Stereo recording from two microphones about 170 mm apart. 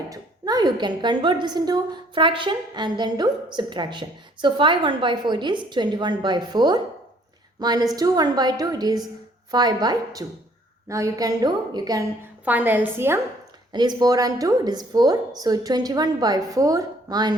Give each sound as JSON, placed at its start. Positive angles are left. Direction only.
{"t": 0.1, "sound": "a woman's voice", "side_deg": -25}
{"t": 12.5, "sound": "a woman's voice", "side_deg": -10}
{"t": 13.7, "sound": "a woman's voice", "side_deg": -25}